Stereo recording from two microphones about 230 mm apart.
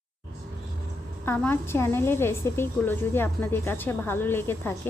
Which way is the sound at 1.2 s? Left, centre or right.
Centre.